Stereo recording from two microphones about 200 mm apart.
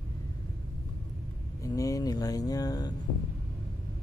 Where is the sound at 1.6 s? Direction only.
15° left (ahead or behind).